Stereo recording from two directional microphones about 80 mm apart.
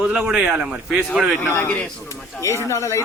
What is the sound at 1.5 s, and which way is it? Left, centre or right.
A man's voice, left.